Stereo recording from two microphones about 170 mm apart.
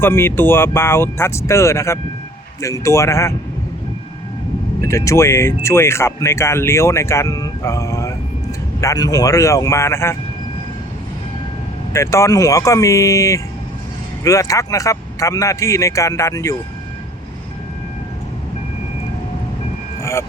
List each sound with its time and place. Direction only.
0.0 s speech: 15° left (ahead or behind)
4.8 s a man's voice: 15° left (ahead or behind)
11.9 s a man's voice: 15° left (ahead or behind)
20.0 s vehicle: 15° left (ahead or behind)